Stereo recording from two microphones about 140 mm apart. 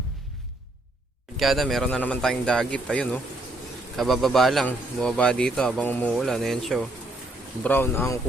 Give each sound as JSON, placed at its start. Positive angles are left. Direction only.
{"t": 1.4, "sound": "speech", "side_deg": 0}
{"t": 6.1, "sound": "speech", "side_deg": 0}
{"t": 7.6, "sound": "speech", "side_deg": 15}